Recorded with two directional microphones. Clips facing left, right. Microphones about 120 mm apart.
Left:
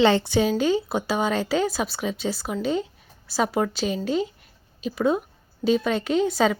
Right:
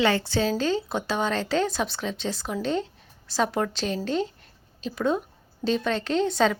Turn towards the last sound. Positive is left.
turn(degrees=5)  # may be behind; listen again after turning